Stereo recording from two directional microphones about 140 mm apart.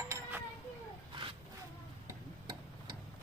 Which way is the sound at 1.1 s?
35° right (ahead or behind).